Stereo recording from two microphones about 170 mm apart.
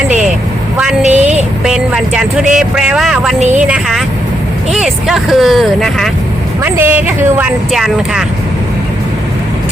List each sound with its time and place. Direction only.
1.0 s a sound: 40° right (ahead or behind)
1.6 s speech: 5° right (ahead or behind)
6.6 s a woman's voice: 10° right (ahead or behind)